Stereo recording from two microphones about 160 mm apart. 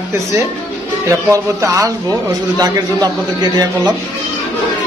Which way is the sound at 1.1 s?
20° right (ahead or behind).